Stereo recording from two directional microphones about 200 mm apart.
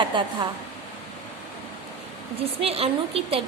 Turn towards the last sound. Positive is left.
turn(degrees=-30)  # may be behind; listen again after turning